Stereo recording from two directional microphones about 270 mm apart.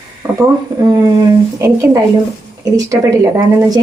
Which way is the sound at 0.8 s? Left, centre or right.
Centre.